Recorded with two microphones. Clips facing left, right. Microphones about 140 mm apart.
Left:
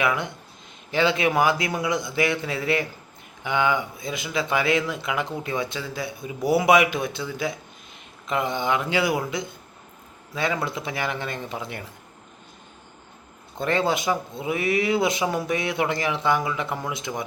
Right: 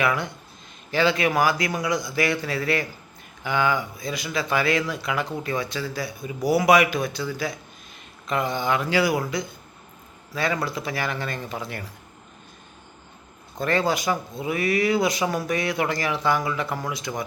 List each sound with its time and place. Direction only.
0.0 s speech: 20° left (ahead or behind)
13.6 s speech: 20° left (ahead or behind)